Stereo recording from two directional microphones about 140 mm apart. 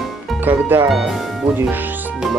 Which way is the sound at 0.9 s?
Centre (ahead or behind).